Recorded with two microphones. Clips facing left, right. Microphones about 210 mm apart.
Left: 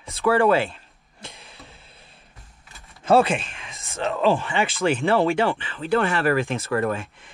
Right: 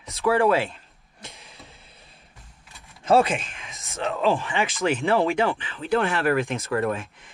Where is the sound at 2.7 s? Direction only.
Centre (ahead or behind).